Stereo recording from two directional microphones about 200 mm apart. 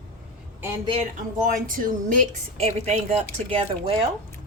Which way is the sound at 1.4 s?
45° right (ahead or behind).